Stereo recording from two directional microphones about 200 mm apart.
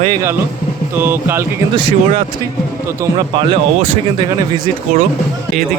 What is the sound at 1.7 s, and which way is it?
Speech, 25° right (ahead or behind).